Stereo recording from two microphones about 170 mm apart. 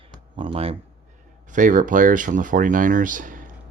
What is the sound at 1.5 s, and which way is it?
Speech, 50° right (ahead or behind).